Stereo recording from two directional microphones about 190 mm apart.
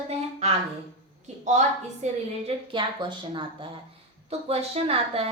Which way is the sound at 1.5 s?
40° right (ahead or behind).